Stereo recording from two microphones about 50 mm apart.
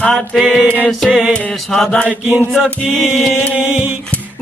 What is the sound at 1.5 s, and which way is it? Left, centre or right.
Mantra, centre.